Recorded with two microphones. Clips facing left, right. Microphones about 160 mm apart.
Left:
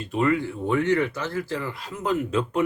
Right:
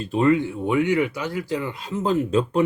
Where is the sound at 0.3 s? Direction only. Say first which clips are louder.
Right 5 dB; 15° right (ahead or behind).